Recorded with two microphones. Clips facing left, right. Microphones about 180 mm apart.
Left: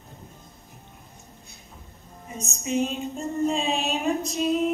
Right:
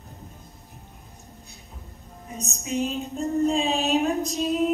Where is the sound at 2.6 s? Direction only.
Centre (ahead or behind).